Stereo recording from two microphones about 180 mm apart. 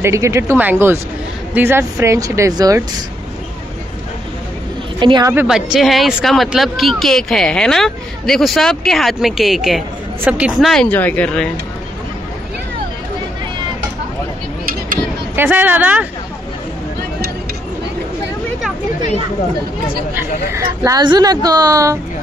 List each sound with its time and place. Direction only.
0.0 s speech: 15° right (ahead or behind)
5.0 s a woman's voice: 25° right (ahead or behind)
5.3 s speech: 5° right (ahead or behind)
15.3 s speech: 10° right (ahead or behind)
20.2 s a woman's voice: 15° right (ahead or behind)